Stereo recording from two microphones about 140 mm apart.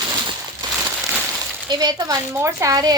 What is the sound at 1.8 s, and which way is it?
A woman's voice, 25° right (ahead or behind).